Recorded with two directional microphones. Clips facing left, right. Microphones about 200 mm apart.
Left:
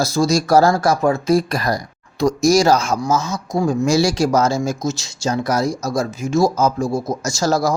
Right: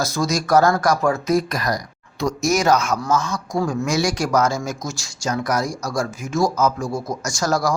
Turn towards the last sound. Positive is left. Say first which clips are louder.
# left 3 dB
turn(degrees=25)  # may be behind; listen again after turning